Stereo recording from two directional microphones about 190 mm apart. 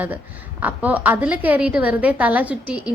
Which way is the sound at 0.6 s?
10° right (ahead or behind).